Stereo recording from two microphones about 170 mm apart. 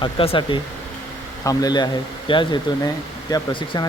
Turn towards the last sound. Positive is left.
turn(degrees=25)  # may be behind; listen again after turning